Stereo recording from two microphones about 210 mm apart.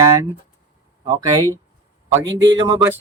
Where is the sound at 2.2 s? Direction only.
60° right (ahead or behind).